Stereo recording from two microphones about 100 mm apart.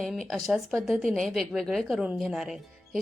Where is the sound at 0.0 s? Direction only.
5° left (ahead or behind).